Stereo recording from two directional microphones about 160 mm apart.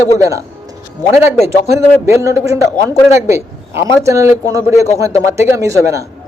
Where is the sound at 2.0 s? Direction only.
20° right (ahead or behind).